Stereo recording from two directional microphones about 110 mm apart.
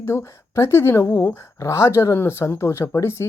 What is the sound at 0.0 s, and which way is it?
Speech, 20° left (ahead or behind).